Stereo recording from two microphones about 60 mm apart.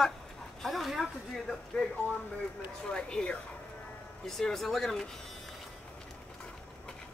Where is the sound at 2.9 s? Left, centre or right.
Centre.